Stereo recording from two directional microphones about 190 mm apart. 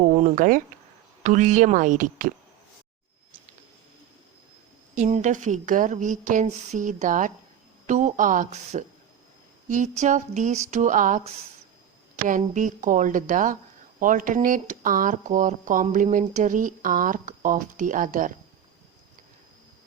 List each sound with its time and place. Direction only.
0.0 s a woman's voice: 40° right (ahead or behind)
4.9 s a woman's voice: 40° right (ahead or behind)